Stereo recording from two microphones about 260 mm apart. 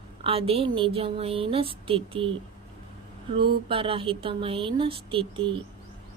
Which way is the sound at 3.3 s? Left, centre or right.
Right.